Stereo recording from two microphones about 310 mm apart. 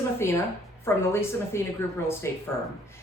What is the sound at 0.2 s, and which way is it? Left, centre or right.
Speech, centre.